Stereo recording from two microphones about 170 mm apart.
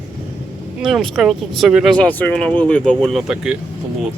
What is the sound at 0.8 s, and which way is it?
Speech, centre (ahead or behind).